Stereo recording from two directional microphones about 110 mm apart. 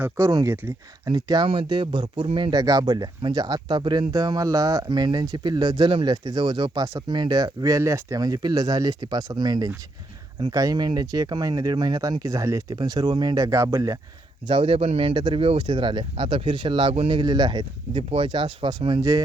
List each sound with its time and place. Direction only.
0.2 s speech: 30° right (ahead or behind)
1.0 s speech: 40° right (ahead or behind)
1.5 s speech: 50° right (ahead or behind)
2.5 s speech: 35° right (ahead or behind)
14.4 s speech: 50° right (ahead or behind)
15.1 s speech: 45° right (ahead or behind)
17.9 s speech: 55° right (ahead or behind)